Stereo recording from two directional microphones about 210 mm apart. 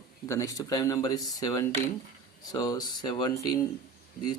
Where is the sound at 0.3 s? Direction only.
15° left (ahead or behind).